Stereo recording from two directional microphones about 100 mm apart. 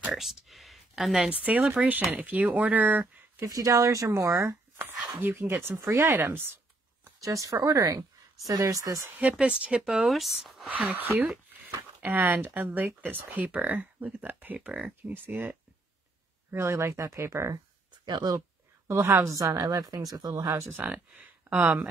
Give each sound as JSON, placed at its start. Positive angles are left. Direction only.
{"t": 0.0, "sound": "speech", "side_deg": -5}
{"t": 1.3, "sound": "speech", "side_deg": -15}
{"t": 1.6, "sound": "speech", "side_deg": -5}
{"t": 2.1, "sound": "speech", "side_deg": -15}
{"t": 3.4, "sound": "speech", "side_deg": -35}
{"t": 4.7, "sound": "a sound", "side_deg": -20}
{"t": 5.2, "sound": "speech", "side_deg": -20}
{"t": 7.2, "sound": "speech", "side_deg": -35}
{"t": 9.2, "sound": "speech", "side_deg": -10}
{"t": 10.9, "sound": "speech", "side_deg": -20}
{"t": 18.0, "sound": "speech", "side_deg": -45}
{"t": 18.9, "sound": "speech", "side_deg": -30}